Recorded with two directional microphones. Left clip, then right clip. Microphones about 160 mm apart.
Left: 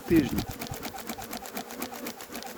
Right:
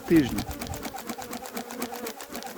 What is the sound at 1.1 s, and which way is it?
Sewing machine, centre (ahead or behind).